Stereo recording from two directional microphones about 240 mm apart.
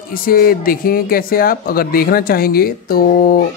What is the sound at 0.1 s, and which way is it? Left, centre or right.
Speech, left.